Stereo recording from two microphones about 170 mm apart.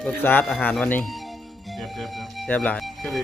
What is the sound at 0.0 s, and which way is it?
Speech, 10° left (ahead or behind).